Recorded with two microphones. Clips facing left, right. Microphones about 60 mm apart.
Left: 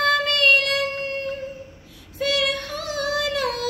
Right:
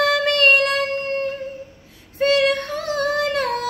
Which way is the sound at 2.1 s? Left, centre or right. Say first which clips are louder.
Right 6 dB; right.